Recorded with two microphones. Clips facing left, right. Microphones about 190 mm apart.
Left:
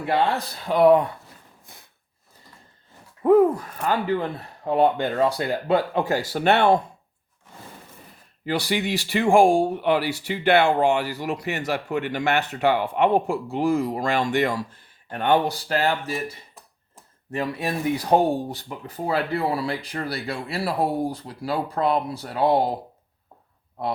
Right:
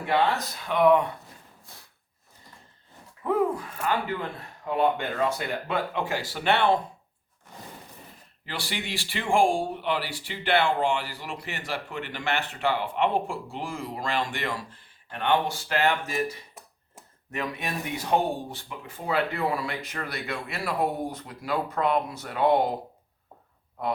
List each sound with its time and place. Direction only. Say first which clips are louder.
0.1 s speech: left 2 dB; 30° left (ahead or behind)
3.2 s speech: left 9 dB; 45° left (ahead or behind)
8.4 s speech: left 10 dB; 40° left (ahead or behind)